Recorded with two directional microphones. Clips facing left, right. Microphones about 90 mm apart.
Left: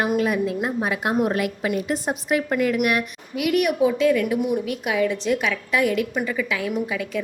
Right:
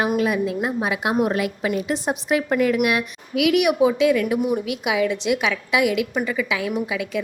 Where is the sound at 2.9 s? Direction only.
90° right; by 4.3 s 75° right (ahead or behind).